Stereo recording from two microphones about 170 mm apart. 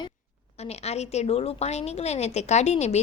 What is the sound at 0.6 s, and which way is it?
A woman's voice, 40° left (ahead or behind).